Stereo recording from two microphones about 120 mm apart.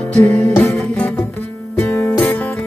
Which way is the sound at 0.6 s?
15° left (ahead or behind).